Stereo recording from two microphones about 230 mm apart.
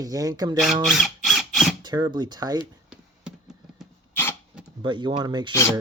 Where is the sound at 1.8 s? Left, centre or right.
Centre.